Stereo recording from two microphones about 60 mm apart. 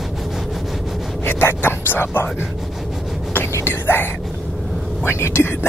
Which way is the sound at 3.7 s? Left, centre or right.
Left.